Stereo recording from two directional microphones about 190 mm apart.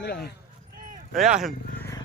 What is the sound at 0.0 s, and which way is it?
Speech, 60° left (ahead or behind).